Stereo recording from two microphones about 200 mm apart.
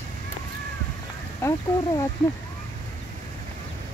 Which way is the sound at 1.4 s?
15° left (ahead or behind).